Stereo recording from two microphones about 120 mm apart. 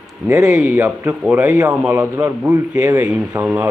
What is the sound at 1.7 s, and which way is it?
A man's voice, 10° right (ahead or behind).